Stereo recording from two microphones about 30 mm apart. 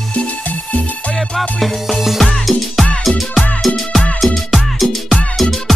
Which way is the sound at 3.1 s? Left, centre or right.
Centre.